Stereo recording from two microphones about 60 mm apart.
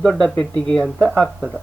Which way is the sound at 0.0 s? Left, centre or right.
Centre.